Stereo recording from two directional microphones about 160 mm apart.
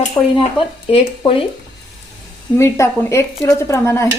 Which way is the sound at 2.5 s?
15° left (ahead or behind).